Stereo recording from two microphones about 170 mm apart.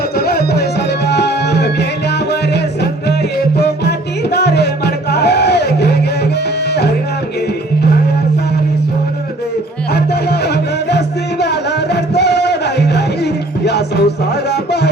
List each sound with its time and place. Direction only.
0.2 s music: 65° left (ahead or behind)
1.0 s music: 80° left
4.4 s music: 75° left (ahead or behind)
9.9 s music: 70° left (ahead or behind)